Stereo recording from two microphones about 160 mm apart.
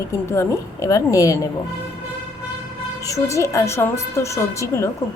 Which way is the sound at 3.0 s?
20° left (ahead or behind).